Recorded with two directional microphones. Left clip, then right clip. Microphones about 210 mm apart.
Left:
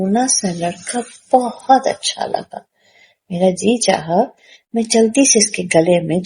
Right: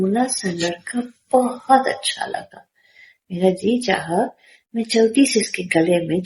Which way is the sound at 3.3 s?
50° left (ahead or behind).